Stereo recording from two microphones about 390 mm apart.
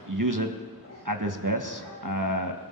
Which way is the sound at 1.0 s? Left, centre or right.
Right.